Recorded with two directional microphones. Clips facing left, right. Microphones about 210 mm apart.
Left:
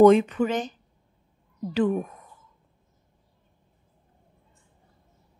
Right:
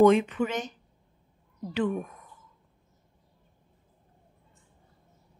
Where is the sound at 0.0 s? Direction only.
40° left (ahead or behind).